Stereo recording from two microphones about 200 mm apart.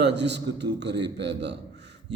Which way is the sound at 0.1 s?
60° right (ahead or behind).